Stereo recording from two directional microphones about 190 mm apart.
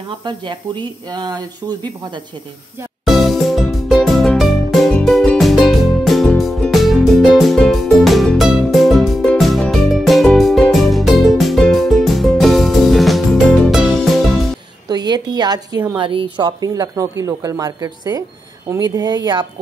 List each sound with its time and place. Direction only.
0.2 s speech: 25° right (ahead or behind)
3.1 s music: centre (ahead or behind)
14.9 s a sound: 20° right (ahead or behind)
16.0 s speech: 25° right (ahead or behind)